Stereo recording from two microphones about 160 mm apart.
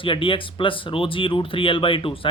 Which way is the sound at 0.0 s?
30° left (ahead or behind).